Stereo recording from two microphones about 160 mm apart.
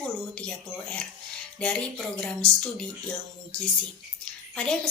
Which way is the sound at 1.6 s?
5° left (ahead or behind).